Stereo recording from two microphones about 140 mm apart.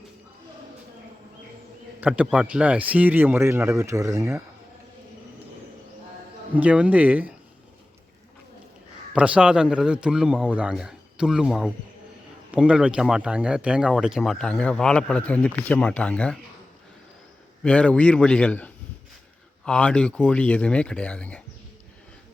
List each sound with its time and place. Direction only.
2.0 s a man's voice: 10° right (ahead or behind)
6.6 s a man's voice: 10° right (ahead or behind)
9.1 s a man's voice: 10° right (ahead or behind); by 16.4 s 10° left (ahead or behind)
17.6 s speech: 10° left (ahead or behind)